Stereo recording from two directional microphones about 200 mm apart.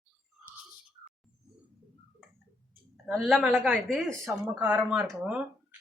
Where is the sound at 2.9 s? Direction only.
Centre (ahead or behind).